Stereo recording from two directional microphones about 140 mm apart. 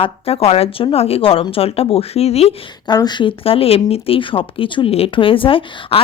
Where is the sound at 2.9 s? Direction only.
30° left (ahead or behind).